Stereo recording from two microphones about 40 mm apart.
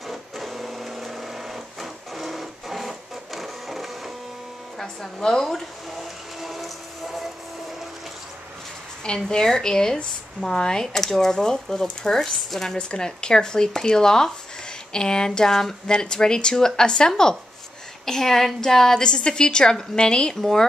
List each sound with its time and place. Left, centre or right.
0.1 s printer: centre
4.7 s speech: centre
5.9 s train: centre
9.0 s a woman's voice: centre